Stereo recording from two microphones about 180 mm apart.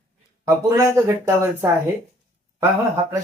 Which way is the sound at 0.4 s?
15° right (ahead or behind).